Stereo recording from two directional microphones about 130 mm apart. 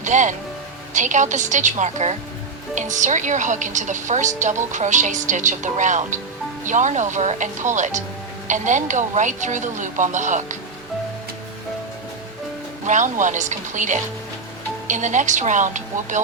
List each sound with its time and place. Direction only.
0.0 s a woman's voice: 70° right (ahead or behind)
12.8 s a woman's voice: 70° right (ahead or behind)